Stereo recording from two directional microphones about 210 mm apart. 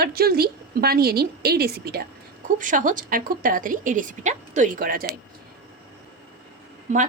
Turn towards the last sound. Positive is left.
turn(degrees=-35)  # may be behind; listen again after turning